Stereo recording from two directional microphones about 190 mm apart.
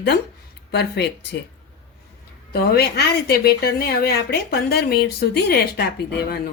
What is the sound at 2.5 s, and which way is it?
Speech, 55° left (ahead or behind).